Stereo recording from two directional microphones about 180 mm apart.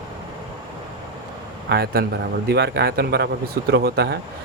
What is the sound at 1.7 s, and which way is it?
Speech, 60° right (ahead or behind).